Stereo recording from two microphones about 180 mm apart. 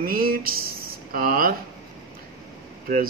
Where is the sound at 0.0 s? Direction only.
55° right (ahead or behind).